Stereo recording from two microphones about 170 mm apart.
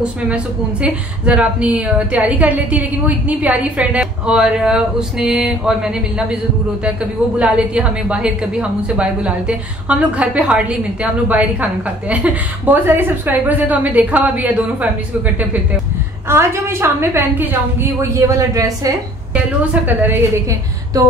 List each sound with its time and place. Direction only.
0.8 s a woman's voice: 5° right (ahead or behind)
7.3 s a woman's voice: 5° right (ahead or behind)
16.3 s a woman's voice: 15° right (ahead or behind)